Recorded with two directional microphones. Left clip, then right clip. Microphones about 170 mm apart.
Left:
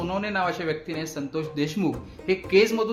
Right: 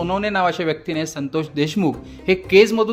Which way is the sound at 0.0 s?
50° right (ahead or behind).